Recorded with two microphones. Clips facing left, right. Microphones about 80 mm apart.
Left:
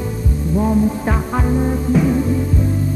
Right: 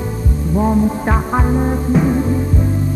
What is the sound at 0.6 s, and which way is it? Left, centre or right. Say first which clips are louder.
Music: right 1 dB; right.